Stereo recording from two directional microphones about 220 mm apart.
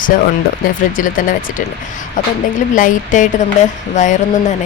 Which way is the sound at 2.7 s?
35° left (ahead or behind).